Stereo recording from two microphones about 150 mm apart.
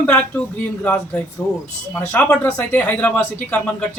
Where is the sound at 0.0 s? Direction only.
10° left (ahead or behind).